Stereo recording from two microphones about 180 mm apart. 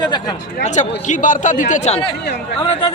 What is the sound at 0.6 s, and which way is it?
A man's voice, 40° left (ahead or behind).